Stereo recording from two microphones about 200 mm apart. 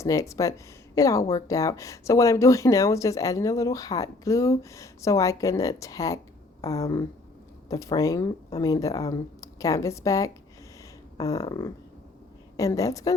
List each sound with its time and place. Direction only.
0.0 s speech: 15° left (ahead or behind)